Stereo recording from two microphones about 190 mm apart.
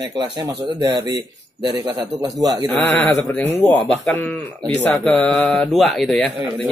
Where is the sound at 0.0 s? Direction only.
25° right (ahead or behind).